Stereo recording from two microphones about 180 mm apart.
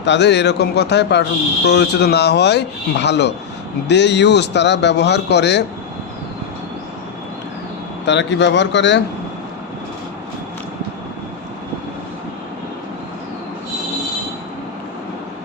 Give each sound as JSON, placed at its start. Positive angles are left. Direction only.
{"t": 0.0, "sound": "a man's voice", "side_deg": 75}
{"t": 8.0, "sound": "a man's voice", "side_deg": 75}